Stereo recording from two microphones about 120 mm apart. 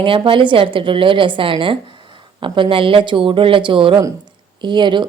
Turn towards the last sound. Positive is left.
turn(degrees=-40)  # may be behind; listen again after turning